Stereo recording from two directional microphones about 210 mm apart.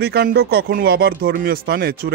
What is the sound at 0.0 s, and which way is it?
Speech, 50° right (ahead or behind).